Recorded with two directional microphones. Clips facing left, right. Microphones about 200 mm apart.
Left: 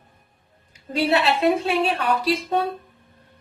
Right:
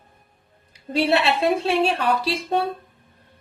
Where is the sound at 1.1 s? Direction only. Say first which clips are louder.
Left 1 dB; 30° right (ahead or behind).